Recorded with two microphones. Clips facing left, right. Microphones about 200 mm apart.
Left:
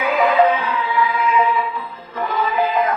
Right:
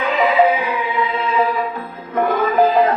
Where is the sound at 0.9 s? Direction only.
30° right (ahead or behind).